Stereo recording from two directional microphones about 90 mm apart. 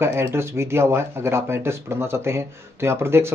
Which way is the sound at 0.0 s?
25° right (ahead or behind).